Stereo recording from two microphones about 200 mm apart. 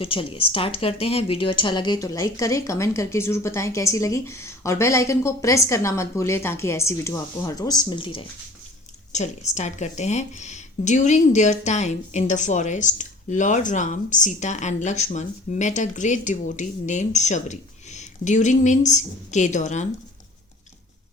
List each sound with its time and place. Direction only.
0.0 s a woman's voice: 25° left (ahead or behind)
9.1 s a woman's voice: 35° left (ahead or behind)